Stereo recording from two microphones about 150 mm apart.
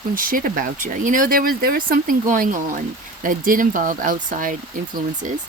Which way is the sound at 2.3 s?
60° right (ahead or behind).